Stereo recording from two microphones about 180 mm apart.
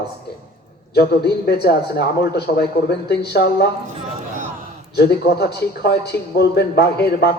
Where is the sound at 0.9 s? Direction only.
60° left (ahead or behind).